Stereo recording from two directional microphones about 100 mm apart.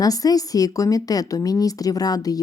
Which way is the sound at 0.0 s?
40° left (ahead or behind).